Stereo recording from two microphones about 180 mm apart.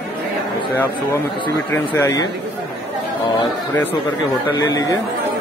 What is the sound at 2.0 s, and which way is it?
Speech, 20° left (ahead or behind).